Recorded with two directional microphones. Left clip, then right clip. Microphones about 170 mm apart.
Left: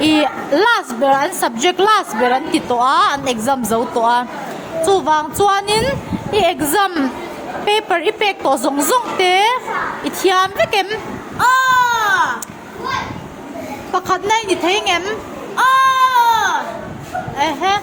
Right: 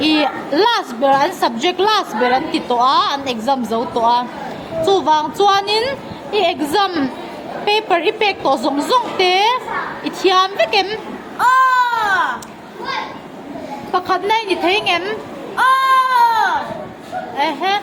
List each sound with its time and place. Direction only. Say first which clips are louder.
0.0 s a child's voice: left 1 dB; 35° left (ahead or behind)
11.3 s a sound: even; 25° left (ahead or behind)
11.7 s baby cry: left 1 dB; 25° left (ahead or behind)
13.9 s a woman's voice: even; 25° left (ahead or behind)
15.5 s baby cry: even; 25° left (ahead or behind)
17.3 s a woman's voice: left 1 dB; 25° left (ahead or behind)